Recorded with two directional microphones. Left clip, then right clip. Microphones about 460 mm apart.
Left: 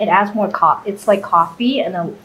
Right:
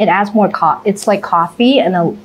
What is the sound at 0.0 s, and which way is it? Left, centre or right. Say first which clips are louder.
A woman's voice: right 3 dB; right.